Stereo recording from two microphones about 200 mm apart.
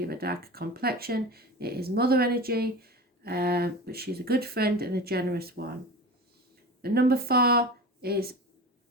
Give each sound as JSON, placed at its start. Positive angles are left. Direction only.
{"t": 0.0, "sound": "speech", "side_deg": -50}
{"t": 6.8, "sound": "speech", "side_deg": -50}